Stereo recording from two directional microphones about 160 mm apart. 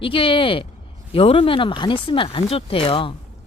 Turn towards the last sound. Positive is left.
turn(degrees=35)  # may be behind; listen again after turning